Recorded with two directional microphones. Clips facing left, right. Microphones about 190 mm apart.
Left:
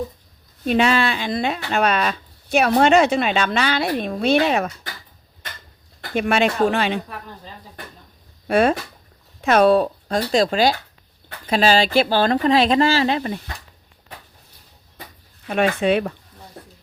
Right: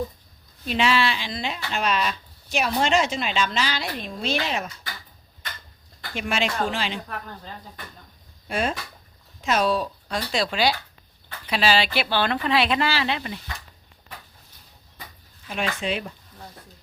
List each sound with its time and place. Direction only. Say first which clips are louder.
0.6 s speech: left 5 dB; 50° left (ahead or behind)
6.0 s speech: left 8 dB; 55° left (ahead or behind)
7.1 s a woman's voice: even; 5° left (ahead or behind)
8.4 s speech: left 9 dB; 60° left (ahead or behind); by 13.4 s 45° left (ahead or behind)
15.4 s speech: left 9 dB; 60° left (ahead or behind)